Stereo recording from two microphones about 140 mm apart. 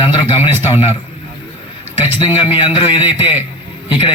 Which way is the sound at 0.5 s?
15° right (ahead or behind).